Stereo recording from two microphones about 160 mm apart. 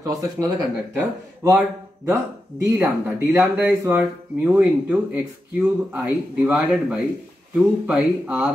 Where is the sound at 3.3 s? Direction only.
10° right (ahead or behind).